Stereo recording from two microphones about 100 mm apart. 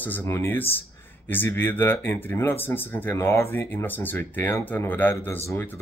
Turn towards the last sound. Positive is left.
turn(degrees=25)  # may be behind; listen again after turning